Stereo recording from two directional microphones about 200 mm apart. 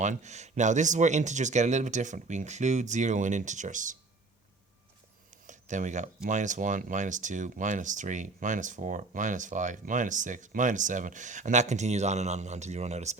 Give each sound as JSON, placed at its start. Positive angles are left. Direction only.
{"t": 0.0, "sound": "speech", "side_deg": -35}
{"t": 5.5, "sound": "a sound", "side_deg": -40}
{"t": 6.2, "sound": "speech", "side_deg": -40}